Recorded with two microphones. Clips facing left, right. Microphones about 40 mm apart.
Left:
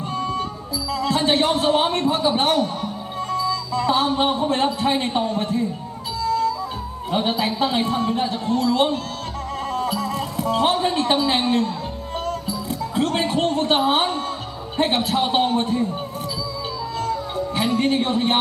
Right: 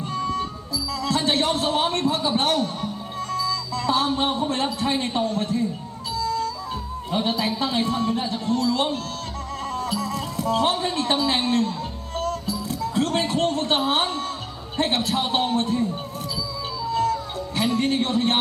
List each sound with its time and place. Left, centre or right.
0.9 s a man's voice: left
6.2 s music: centre
7.1 s a man's voice: left
12.2 s music: centre
15.0 s a man's voice: centre
17.1 s music: centre